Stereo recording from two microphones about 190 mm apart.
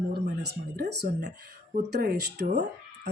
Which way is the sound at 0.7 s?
55° right (ahead or behind).